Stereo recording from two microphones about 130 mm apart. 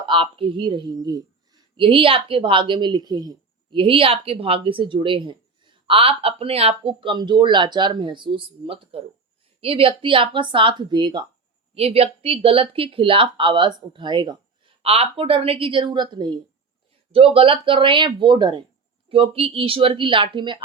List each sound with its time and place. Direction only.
0.0 s a woman's voice: 40° right (ahead or behind)
11.7 s speech: 50° right (ahead or behind); by 14.3 s 35° right (ahead or behind)
14.8 s speech: 50° right (ahead or behind)
17.1 s a woman's voice: 50° right (ahead or behind)